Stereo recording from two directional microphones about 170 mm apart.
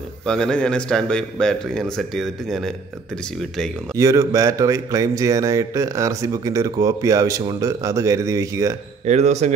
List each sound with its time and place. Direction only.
0.3 s speech: 5° left (ahead or behind)
3.9 s speech: 20° right (ahead or behind)
9.0 s speech: 40° right (ahead or behind)